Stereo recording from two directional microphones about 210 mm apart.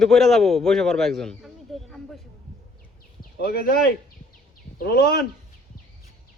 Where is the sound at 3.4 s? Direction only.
50° left (ahead or behind).